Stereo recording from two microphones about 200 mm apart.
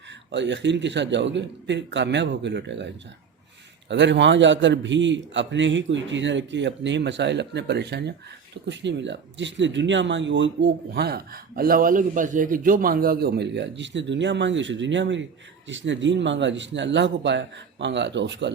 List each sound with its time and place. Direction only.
0.3 s speech: 60° right (ahead or behind)
3.8 s speech: 60° right (ahead or behind)